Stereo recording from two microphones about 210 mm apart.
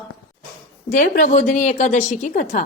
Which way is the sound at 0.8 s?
40° left (ahead or behind).